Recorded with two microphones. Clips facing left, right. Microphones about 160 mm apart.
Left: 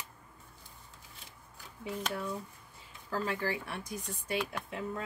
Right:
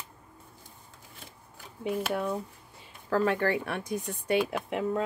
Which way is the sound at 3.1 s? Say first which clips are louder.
Right 8 dB; 65° right (ahead or behind).